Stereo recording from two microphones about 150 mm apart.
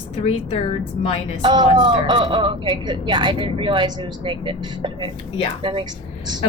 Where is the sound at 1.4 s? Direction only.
30° right (ahead or behind).